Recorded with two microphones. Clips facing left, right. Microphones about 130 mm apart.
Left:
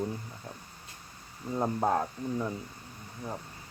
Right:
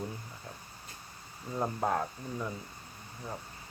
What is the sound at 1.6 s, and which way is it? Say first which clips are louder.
Speech: left 3 dB; 15° left (ahead or behind).